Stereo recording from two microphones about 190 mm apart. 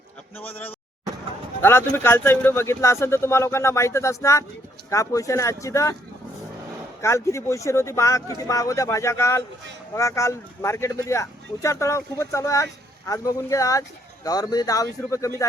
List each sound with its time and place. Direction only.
1.6 s a man's voice: 10° left (ahead or behind)
7.0 s a man's voice: 15° left (ahead or behind)